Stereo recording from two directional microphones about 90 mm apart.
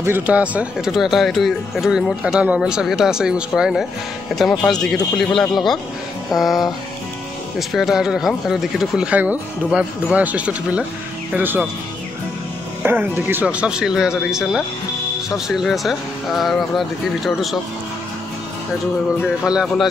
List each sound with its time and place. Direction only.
0.3 s speech: 15° right (ahead or behind)
4.6 s speech: 5° left (ahead or behind); by 11.6 s 20° right (ahead or behind)
12.8 s speech: 20° right (ahead or behind); by 17.6 s centre (ahead or behind)
19.4 s speech: 10° right (ahead or behind)